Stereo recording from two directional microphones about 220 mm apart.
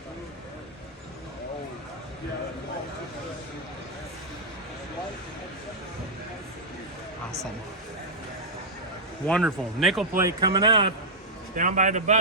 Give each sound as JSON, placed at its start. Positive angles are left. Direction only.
{"t": 9.2, "sound": "speech", "side_deg": 0}
{"t": 10.2, "sound": "speech", "side_deg": -15}
{"t": 11.5, "sound": "a man's voice", "side_deg": -35}